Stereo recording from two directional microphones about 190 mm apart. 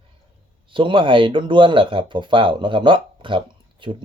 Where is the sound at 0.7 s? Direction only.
25° right (ahead or behind).